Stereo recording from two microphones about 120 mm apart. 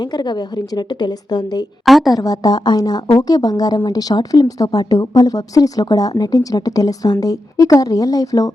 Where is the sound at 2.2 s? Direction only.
30° left (ahead or behind).